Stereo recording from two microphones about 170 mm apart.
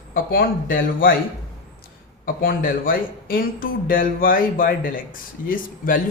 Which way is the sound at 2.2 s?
55° left (ahead or behind).